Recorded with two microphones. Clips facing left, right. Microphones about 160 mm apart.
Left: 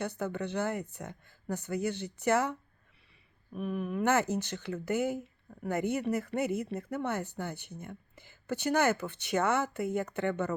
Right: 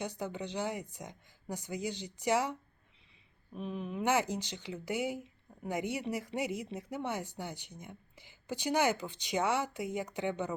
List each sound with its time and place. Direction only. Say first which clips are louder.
0.0 s speech: left 4 dB; 15° right (ahead or behind)
3.5 s speech: left 5 dB; 25° right (ahead or behind)
3.9 s speech: left 2 dB; 10° right (ahead or behind)